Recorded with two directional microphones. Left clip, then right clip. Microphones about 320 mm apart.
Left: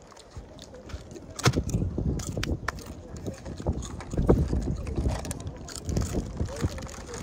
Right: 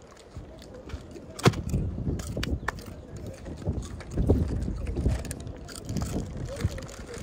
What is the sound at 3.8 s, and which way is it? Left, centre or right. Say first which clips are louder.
Boat: left 4 dB; centre.